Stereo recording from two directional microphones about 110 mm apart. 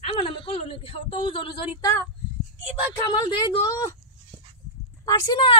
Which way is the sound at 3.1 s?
40° left (ahead or behind).